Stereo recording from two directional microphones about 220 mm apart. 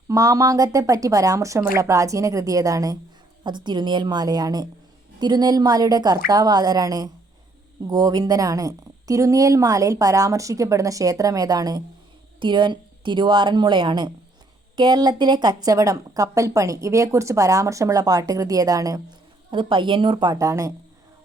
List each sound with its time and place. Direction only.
0.1 s a woman's voice: 15° right (ahead or behind)